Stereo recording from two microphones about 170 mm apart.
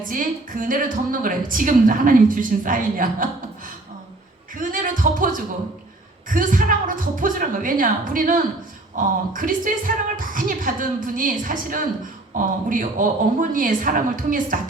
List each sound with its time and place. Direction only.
0.0 s a woman's voice: 50° right (ahead or behind)
4.5 s a woman's voice: 50° right (ahead or behind)